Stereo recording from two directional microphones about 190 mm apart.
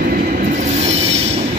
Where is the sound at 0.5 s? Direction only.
35° right (ahead or behind).